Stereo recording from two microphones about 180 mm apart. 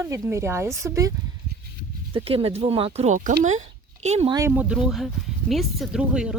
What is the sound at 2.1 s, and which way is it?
Speech, 30° right (ahead or behind).